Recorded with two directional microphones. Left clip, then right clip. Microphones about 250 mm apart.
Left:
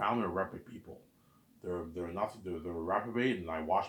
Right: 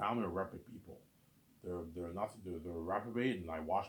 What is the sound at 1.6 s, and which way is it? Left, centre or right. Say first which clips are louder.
Speech: left 5 dB; centre.